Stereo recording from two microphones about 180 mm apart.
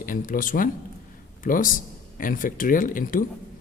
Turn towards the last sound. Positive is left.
turn(degrees=50)  # may be behind; listen again after turning